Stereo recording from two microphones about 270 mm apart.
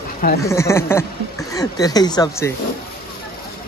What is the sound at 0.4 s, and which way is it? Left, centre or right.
Speech, centre.